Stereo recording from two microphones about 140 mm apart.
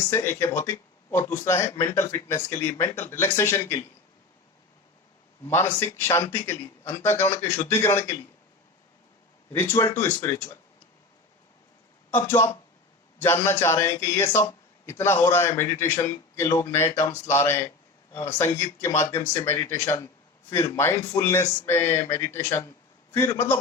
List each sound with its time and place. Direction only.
0.1 s speech: 20° left (ahead or behind)
5.5 s a man's voice: 15° left (ahead or behind)
9.5 s speech: 20° left (ahead or behind)
12.1 s a man's voice: 20° left (ahead or behind)